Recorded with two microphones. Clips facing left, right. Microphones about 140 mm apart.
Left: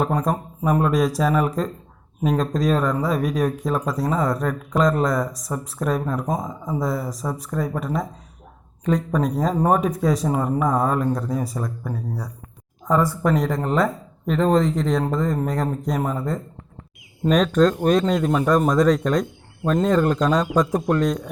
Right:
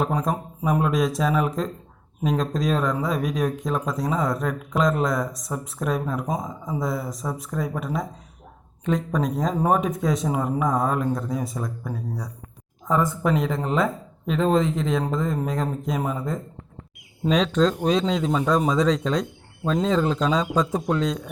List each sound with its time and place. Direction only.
0.0 s speech: centre (ahead or behind)
12.9 s speech: 20° right (ahead or behind)
13.6 s speech: 5° right (ahead or behind)
16.0 s speech: 15° right (ahead or behind)
17.2 s speech: 5° left (ahead or behind)